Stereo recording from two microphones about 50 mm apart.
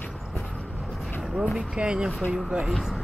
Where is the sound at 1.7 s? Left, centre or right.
Centre.